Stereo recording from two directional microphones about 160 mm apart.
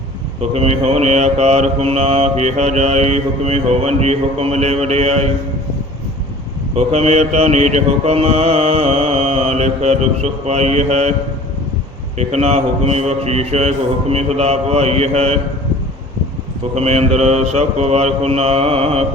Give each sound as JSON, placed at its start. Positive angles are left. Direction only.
{"t": 0.5, "sound": "mantra", "side_deg": -40}
{"t": 6.7, "sound": "mantra", "side_deg": -40}
{"t": 12.1, "sound": "mantra", "side_deg": -40}
{"t": 16.7, "sound": "mantra", "side_deg": -40}